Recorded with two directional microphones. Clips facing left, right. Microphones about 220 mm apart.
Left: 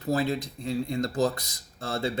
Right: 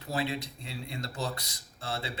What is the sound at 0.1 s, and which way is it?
Speech, 40° left (ahead or behind).